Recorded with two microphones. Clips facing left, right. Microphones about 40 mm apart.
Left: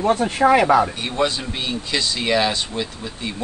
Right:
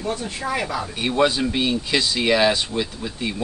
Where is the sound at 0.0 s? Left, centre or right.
Left.